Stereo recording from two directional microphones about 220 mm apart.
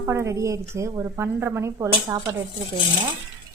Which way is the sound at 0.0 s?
15° right (ahead or behind).